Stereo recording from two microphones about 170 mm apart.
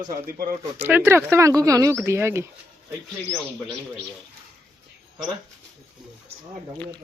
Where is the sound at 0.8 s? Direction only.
10° right (ahead or behind).